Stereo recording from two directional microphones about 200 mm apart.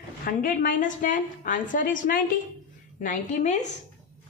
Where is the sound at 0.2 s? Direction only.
45° left (ahead or behind).